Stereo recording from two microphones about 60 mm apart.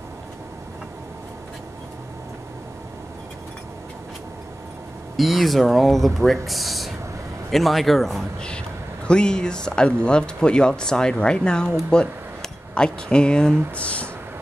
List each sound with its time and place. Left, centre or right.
5.1 s speech: centre
8.4 s speech: centre